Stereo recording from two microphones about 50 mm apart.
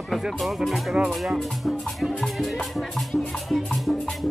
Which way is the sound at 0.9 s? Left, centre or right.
Centre.